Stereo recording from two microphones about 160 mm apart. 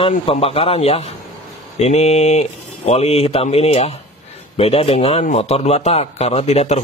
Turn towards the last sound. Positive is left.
turn(degrees=40)  # may be behind; listen again after turning